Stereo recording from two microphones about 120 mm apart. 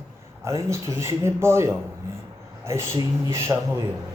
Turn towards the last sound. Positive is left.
turn(degrees=-25)  # may be behind; listen again after turning